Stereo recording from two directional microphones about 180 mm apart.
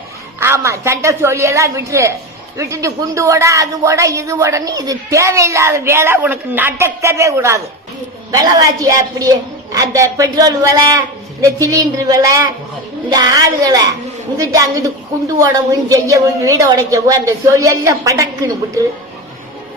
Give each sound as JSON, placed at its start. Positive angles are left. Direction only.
{"t": 0.3, "sound": "a woman's voice", "side_deg": -15}